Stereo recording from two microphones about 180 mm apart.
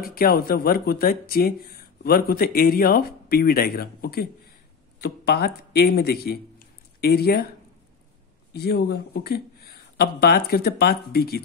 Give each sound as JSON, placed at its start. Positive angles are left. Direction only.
{"t": 0.0, "sound": "speech", "side_deg": 55}
{"t": 8.5, "sound": "speech", "side_deg": 65}